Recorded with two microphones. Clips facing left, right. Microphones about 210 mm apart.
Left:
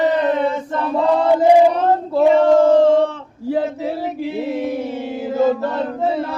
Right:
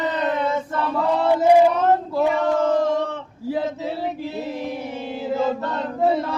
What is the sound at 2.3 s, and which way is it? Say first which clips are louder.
Male singing: left 10 dB; 30° left (ahead or behind).